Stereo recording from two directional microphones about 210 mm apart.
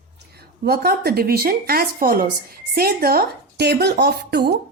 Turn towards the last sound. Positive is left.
turn(degrees=-50)  # may be behind; listen again after turning